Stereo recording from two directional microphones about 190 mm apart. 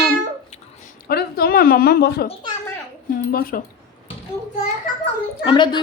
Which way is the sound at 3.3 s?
50° left (ahead or behind).